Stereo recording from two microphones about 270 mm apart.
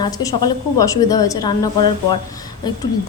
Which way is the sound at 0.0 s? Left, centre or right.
Centre.